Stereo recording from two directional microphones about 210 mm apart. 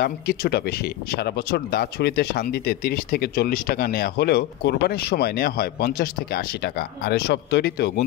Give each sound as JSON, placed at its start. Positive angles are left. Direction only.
{"t": 0.0, "sound": "speech", "side_deg": 50}